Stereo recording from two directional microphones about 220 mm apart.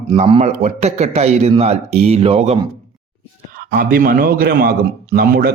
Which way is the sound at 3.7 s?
40° right (ahead or behind).